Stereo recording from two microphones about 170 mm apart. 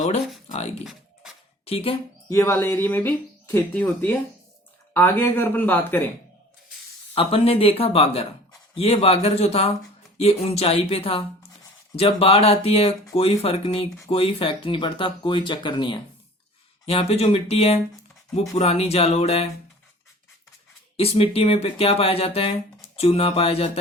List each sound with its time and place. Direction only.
0.4 s a sound: 40° left (ahead or behind)
1.6 s speech: 35° left (ahead or behind)
2.3 s speech: 15° left (ahead or behind)
7.1 s speech: 35° left (ahead or behind)
20.9 s speech: 35° left (ahead or behind)